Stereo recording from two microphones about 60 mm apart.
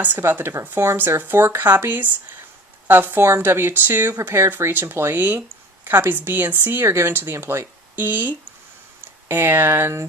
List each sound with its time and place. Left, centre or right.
0.3 s a woman's voice: right
3.2 s speech: right
4.2 s speech: right
4.4 s speech: right
7.9 s speech: right